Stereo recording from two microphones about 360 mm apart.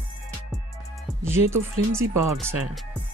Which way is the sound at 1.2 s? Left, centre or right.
Centre.